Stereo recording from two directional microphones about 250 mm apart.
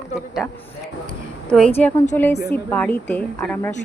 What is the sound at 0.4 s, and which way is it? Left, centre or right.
Speech, centre.